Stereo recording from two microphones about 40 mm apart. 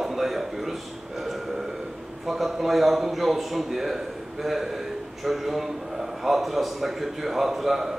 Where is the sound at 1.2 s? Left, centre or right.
Centre.